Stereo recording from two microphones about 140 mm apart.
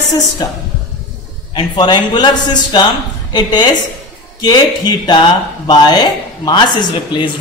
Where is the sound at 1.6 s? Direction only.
30° left (ahead or behind).